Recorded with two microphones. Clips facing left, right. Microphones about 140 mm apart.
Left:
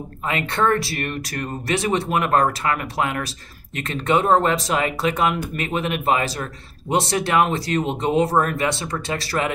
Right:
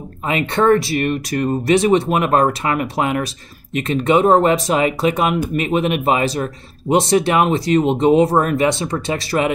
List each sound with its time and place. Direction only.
0.3 s speech: 20° right (ahead or behind)